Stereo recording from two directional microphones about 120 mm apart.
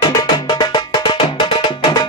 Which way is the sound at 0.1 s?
35° left (ahead or behind).